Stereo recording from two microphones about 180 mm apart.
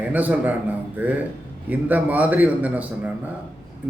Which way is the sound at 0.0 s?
10° right (ahead or behind).